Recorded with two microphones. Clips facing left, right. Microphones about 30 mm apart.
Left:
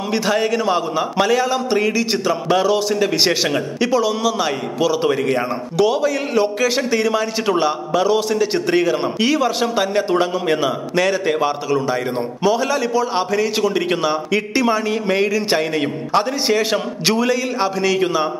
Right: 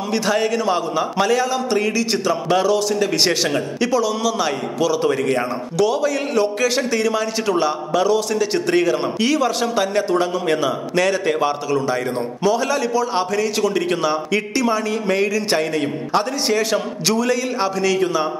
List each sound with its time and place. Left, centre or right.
0.1 s a man's voice: centre